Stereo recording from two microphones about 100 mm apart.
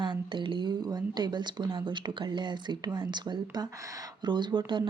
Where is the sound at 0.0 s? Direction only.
50° right (ahead or behind).